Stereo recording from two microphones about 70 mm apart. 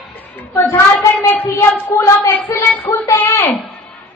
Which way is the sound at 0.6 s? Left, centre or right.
Left.